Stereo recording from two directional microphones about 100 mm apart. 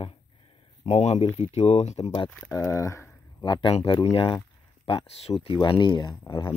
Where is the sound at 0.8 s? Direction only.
90° left.